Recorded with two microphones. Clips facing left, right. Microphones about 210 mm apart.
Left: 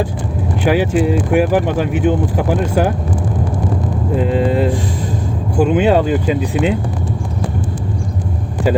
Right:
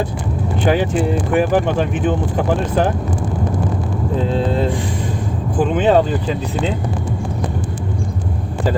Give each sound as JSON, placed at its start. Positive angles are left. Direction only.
{"t": 0.6, "sound": "speech", "side_deg": 5}
{"t": 4.3, "sound": "speech", "side_deg": 10}